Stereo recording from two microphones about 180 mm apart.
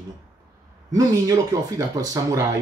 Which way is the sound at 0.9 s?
20° right (ahead or behind).